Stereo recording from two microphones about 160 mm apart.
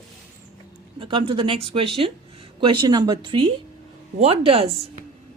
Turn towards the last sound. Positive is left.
turn(degrees=-35)  # may be behind; listen again after turning